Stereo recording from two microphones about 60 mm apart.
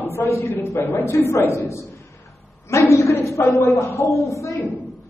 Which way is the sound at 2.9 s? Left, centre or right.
Left.